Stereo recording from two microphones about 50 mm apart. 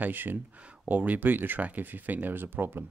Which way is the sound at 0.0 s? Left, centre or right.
Right.